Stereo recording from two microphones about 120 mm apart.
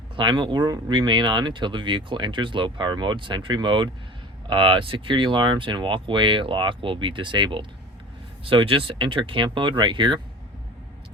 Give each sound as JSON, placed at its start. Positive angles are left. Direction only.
{"t": 0.2, "sound": "speech", "side_deg": -40}